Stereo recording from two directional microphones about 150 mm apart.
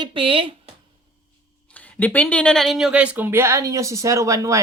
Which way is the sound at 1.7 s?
10° left (ahead or behind).